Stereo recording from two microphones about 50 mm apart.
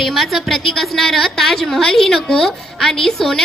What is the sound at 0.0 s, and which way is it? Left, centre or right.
A woman's voice, centre.